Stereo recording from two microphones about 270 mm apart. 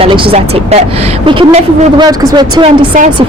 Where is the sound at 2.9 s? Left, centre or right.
Right.